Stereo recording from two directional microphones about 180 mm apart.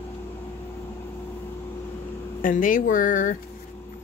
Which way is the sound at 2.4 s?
50° left (ahead or behind).